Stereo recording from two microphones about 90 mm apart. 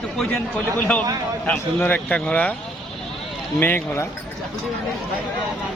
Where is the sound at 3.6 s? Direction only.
25° left (ahead or behind).